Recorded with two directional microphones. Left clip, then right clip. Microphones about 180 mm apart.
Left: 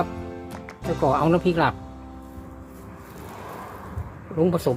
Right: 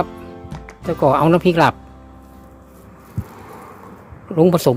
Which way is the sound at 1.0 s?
45° right (ahead or behind).